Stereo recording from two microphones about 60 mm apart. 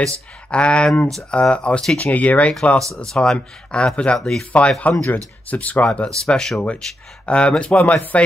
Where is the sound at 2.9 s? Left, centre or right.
Centre.